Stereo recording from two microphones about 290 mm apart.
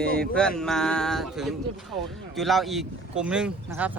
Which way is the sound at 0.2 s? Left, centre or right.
Centre.